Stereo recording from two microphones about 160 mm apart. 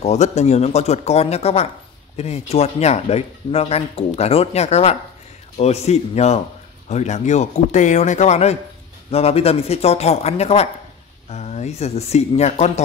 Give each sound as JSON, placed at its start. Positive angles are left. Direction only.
{"t": 0.0, "sound": "speech", "side_deg": 45}